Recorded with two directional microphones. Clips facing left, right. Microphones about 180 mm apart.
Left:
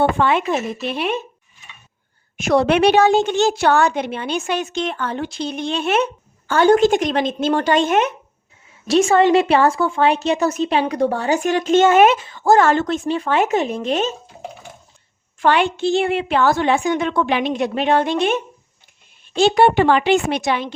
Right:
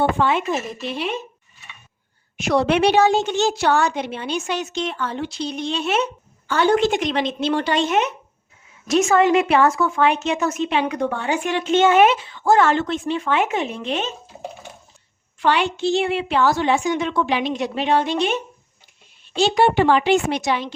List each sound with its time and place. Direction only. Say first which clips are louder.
0.0 s a woman's voice: left 2 dB; 65° left (ahead or behind)
2.4 s a woman's voice: left 3 dB; 50° left (ahead or behind)
8.9 s a woman's voice: left 2 dB; 30° left (ahead or behind)
15.4 s a woman's voice: left 3 dB; 50° left (ahead or behind)
19.4 s a woman's voice: left 3 dB; 55° left (ahead or behind)